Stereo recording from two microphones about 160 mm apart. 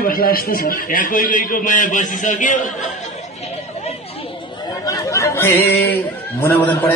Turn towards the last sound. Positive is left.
turn(degrees=10)  # may be behind; listen again after turning